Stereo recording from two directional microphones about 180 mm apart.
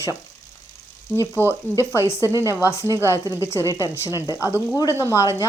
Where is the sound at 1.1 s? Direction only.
15° right (ahead or behind).